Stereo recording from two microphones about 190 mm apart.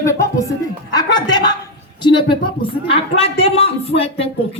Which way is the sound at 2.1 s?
25° left (ahead or behind).